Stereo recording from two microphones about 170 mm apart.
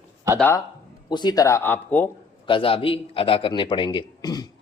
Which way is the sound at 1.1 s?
25° left (ahead or behind).